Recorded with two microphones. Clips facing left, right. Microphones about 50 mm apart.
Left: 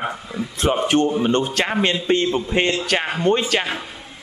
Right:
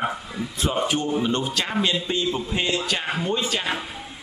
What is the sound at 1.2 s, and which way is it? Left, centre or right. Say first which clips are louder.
A man's voice: left 5 dB; left.